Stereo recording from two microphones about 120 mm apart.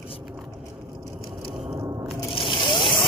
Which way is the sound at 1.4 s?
25° right (ahead or behind).